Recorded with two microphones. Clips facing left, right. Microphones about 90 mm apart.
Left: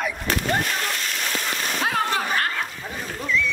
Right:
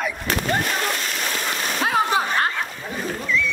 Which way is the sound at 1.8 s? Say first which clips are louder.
Right 4 dB; 20° right (ahead or behind).